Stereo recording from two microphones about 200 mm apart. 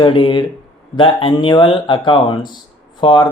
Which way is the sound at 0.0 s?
25° left (ahead or behind).